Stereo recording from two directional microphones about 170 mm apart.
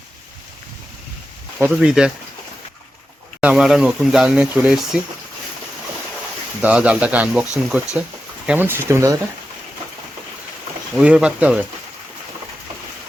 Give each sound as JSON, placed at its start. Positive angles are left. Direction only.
{"t": 1.5, "sound": "speech", "side_deg": -5}
{"t": 3.4, "sound": "speech", "side_deg": -5}
{"t": 6.6, "sound": "speech", "side_deg": -10}
{"t": 10.9, "sound": "speech", "side_deg": -5}